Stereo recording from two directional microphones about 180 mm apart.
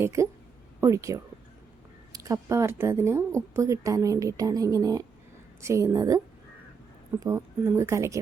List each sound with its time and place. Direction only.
0.0 s a woman's voice: 15° right (ahead or behind)
7.2 s a woman's voice: 15° right (ahead or behind)